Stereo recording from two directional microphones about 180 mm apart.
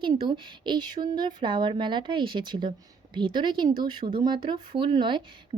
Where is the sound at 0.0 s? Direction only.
25° right (ahead or behind).